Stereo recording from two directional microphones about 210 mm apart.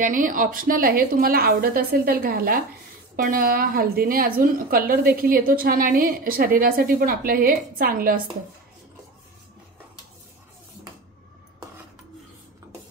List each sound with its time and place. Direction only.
0.0 s a woman's voice: 40° right (ahead or behind)